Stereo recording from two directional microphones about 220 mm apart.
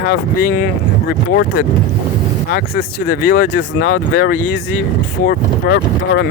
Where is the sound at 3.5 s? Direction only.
55° left (ahead or behind).